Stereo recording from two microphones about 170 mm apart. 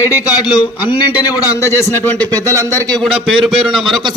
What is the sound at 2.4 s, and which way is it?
Speech, 20° right (ahead or behind).